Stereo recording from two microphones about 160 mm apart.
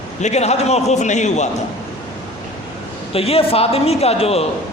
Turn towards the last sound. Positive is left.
turn(degrees=40)  # may be behind; listen again after turning